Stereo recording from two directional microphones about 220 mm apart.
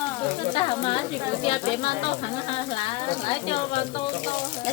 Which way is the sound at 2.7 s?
25° left (ahead or behind).